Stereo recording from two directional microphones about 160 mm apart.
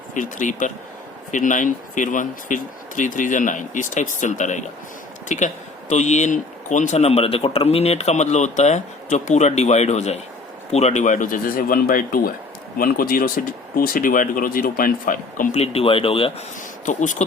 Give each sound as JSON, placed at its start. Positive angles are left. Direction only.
{"t": 0.1, "sound": "a man's voice", "side_deg": 55}
{"t": 15.5, "sound": "speech", "side_deg": 40}
{"t": 16.8, "sound": "a man's voice", "side_deg": 50}